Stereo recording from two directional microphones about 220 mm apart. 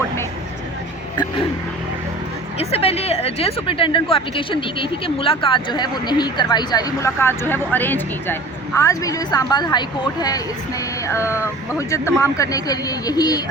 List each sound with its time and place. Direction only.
1.1 s speech: 20° left (ahead or behind)
2.6 s speech: 25° left (ahead or behind)